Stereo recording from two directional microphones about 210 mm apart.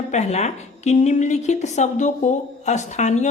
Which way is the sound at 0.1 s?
35° left (ahead or behind).